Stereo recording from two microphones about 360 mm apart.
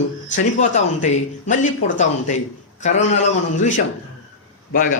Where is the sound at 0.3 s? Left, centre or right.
Left.